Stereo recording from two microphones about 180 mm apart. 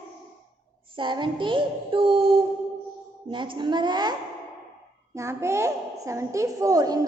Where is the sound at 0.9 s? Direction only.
25° right (ahead or behind).